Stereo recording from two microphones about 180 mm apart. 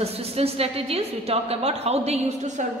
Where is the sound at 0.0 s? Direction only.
35° right (ahead or behind).